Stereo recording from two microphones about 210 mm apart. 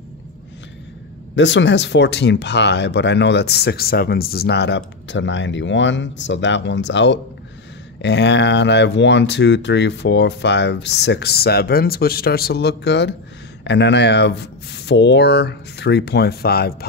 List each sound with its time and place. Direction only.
1.3 s speech: 60° left (ahead or behind)